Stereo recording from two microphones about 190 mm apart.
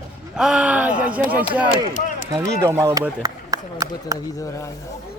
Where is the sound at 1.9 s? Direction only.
40° left (ahead or behind).